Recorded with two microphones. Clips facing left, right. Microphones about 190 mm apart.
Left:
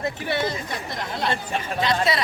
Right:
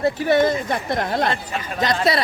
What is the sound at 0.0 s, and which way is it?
Speech, 45° right (ahead or behind).